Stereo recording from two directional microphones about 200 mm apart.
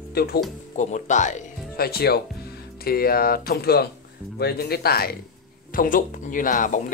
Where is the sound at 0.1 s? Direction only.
50° left (ahead or behind).